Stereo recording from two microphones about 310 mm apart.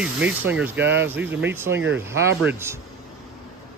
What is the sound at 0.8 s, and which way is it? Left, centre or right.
Speech, right.